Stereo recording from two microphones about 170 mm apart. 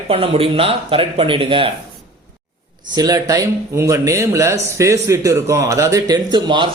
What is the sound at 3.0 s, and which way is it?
Speech, 20° right (ahead or behind).